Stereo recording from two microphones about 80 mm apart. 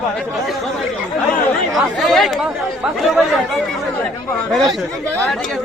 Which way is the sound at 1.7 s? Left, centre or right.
Centre.